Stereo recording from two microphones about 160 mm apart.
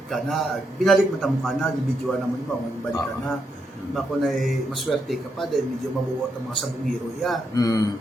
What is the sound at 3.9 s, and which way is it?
A man's voice, centre (ahead or behind).